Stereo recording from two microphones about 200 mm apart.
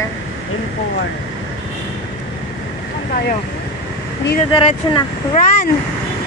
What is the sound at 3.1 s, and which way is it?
Speech, 50° left (ahead or behind).